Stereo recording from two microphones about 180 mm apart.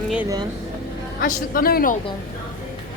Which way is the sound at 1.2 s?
55° left (ahead or behind).